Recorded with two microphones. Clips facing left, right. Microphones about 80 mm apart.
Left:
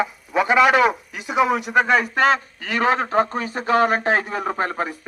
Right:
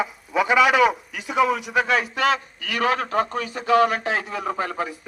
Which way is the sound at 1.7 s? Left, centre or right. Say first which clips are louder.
Left 4 dB; left.